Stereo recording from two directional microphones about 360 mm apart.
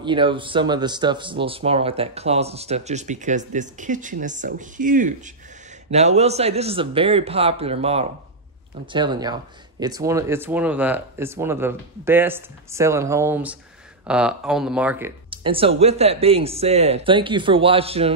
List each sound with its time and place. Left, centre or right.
0.0 s speech: centre